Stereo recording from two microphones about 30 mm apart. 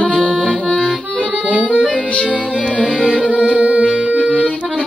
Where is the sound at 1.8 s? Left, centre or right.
Left.